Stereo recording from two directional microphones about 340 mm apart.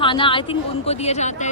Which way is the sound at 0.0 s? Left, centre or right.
Centre.